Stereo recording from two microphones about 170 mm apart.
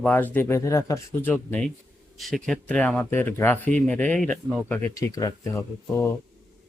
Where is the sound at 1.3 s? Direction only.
5° left (ahead or behind).